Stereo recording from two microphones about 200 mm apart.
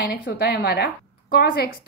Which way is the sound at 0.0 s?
50° left (ahead or behind).